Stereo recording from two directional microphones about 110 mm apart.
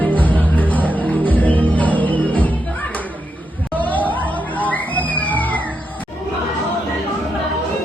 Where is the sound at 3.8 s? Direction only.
15° left (ahead or behind).